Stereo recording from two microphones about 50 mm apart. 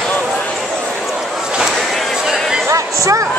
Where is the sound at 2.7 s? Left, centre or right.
Right.